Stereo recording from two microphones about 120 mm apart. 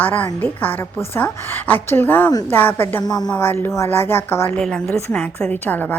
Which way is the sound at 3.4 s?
20° left (ahead or behind).